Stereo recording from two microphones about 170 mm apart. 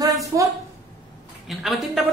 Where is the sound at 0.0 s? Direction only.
20° right (ahead or behind).